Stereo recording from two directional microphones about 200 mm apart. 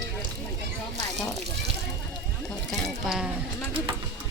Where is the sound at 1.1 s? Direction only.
Centre (ahead or behind).